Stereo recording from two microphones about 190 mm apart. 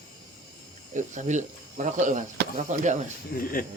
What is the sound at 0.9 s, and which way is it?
Speech, 40° right (ahead or behind).